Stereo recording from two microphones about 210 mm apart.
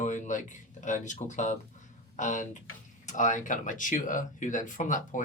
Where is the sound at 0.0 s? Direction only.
35° left (ahead or behind).